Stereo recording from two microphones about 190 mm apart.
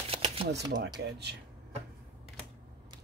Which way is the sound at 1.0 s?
60° right (ahead or behind).